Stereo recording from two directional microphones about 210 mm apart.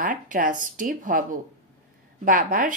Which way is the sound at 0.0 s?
40° right (ahead or behind).